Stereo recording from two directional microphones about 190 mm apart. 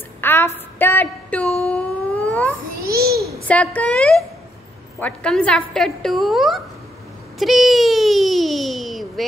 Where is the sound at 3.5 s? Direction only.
5° left (ahead or behind).